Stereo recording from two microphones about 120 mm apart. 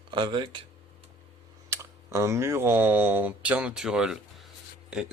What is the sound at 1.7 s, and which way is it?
Speech, 25° right (ahead or behind).